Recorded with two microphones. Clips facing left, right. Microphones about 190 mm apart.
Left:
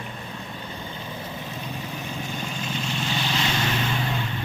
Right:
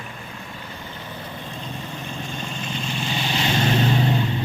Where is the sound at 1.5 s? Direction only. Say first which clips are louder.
Even; 5° left (ahead or behind); by 3.3 s 10° right (ahead or behind).